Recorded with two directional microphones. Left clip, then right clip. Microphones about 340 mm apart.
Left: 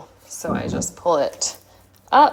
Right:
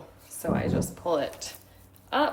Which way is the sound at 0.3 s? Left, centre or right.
Centre.